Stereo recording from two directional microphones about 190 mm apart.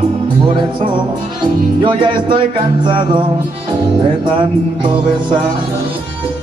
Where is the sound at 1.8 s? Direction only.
25° right (ahead or behind).